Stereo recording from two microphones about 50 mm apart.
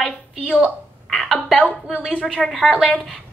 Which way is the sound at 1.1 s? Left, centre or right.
Centre.